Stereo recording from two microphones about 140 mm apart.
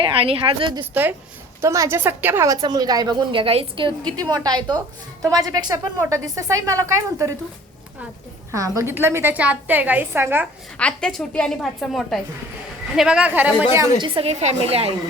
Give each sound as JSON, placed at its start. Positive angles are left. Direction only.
{"t": 0.0, "sound": "a woman's voice", "side_deg": -40}
{"t": 1.6, "sound": "a woman's voice", "side_deg": -20}
{"t": 3.4, "sound": "a woman's voice", "side_deg": -40}
{"t": 8.5, "sound": "a woman's voice", "side_deg": -25}
{"t": 10.8, "sound": "a woman's voice", "side_deg": 5}
{"t": 14.0, "sound": "a woman's voice", "side_deg": -40}